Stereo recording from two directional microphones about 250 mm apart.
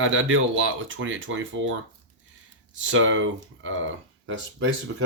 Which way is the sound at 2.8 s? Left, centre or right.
Right.